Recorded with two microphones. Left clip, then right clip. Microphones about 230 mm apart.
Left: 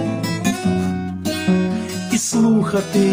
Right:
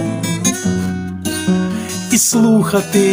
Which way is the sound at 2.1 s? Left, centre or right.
Right.